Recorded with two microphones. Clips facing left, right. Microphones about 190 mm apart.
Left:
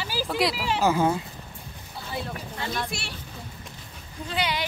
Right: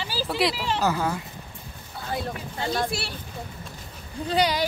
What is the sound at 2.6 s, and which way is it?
Speech, 35° right (ahead or behind).